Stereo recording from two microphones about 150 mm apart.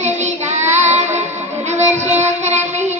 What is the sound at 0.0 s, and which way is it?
Child singing, 50° right (ahead or behind).